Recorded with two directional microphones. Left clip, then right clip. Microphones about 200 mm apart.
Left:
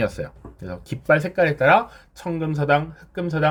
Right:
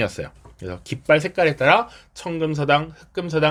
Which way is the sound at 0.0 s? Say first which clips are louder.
Even; 25° right (ahead or behind).